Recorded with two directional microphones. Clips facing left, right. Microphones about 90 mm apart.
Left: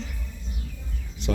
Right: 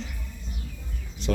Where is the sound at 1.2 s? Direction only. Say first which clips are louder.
Right 1 dB; 20° left (ahead or behind).